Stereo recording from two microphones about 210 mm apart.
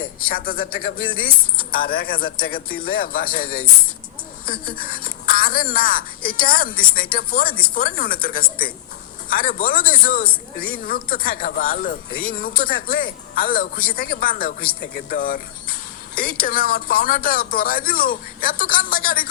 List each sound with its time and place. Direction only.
0.0 s speech: 45° left (ahead or behind)